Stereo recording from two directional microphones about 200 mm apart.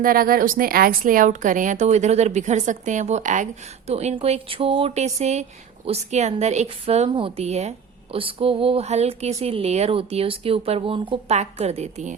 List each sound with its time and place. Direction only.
0.0 s a woman's voice: 45° right (ahead or behind)